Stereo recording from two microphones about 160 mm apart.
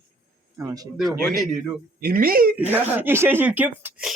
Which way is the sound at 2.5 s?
10° right (ahead or behind).